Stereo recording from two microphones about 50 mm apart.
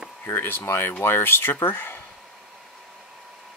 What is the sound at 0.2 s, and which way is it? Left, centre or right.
Speech, left.